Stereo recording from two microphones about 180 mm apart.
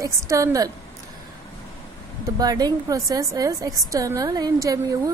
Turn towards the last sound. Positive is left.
turn(degrees=-20)  # may be behind; listen again after turning